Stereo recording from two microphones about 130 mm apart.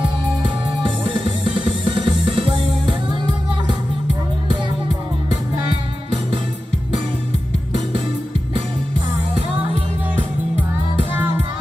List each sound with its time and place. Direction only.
1.6 s music: 35° right (ahead or behind)